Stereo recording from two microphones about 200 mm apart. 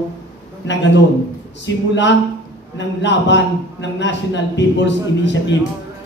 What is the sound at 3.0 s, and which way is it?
A man's voice, 60° left (ahead or behind).